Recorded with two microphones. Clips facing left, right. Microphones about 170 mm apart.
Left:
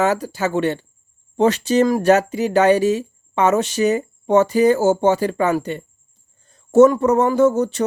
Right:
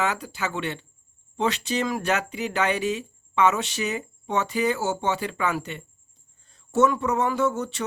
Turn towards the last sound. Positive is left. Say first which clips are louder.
# left 10 dB
turn(degrees=40)  # may be behind; listen again after turning